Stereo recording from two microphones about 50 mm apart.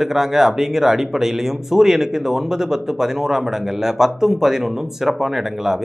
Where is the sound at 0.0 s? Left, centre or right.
Centre.